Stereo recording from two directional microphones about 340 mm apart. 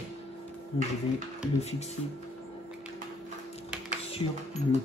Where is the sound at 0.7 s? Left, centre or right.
Centre.